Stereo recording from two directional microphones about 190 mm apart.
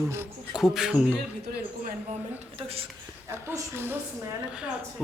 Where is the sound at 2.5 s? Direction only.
30° right (ahead or behind).